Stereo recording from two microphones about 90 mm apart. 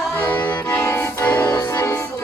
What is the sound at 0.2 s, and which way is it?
Accordion, 20° left (ahead or behind).